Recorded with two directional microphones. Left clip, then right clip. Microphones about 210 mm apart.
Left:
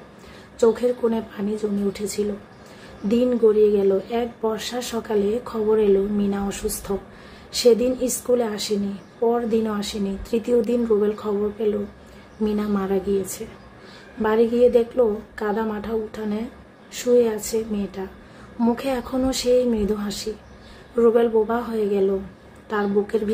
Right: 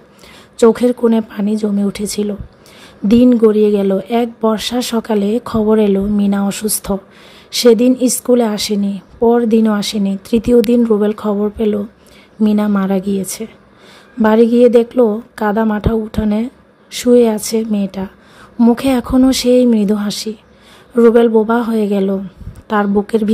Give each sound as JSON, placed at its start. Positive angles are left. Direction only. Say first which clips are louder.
{"t": 0.6, "sound": "speech", "louder": "right 8 dB", "side_deg": -45}
{"t": 14.2, "sound": "speech", "louder": "right 8 dB", "side_deg": -45}